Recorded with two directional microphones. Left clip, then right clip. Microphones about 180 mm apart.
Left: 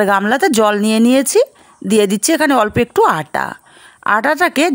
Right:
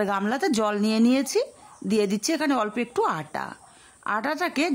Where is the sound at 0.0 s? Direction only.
45° left (ahead or behind).